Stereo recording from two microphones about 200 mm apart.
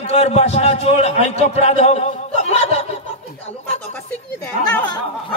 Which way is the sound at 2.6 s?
35° left (ahead or behind).